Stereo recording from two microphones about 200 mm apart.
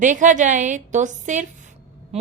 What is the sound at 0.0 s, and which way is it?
A woman's voice, 40° right (ahead or behind).